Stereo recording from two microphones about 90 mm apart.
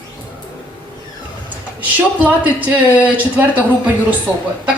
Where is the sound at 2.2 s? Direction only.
15° right (ahead or behind).